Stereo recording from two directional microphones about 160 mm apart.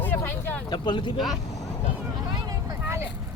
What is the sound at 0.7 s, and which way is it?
Speech, 30° left (ahead or behind).